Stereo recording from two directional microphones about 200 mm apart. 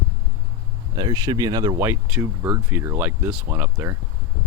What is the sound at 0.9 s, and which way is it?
Speech, 20° right (ahead or behind).